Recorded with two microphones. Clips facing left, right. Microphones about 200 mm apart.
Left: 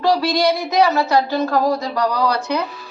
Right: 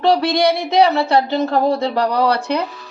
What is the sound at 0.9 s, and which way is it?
Speech, 30° right (ahead or behind).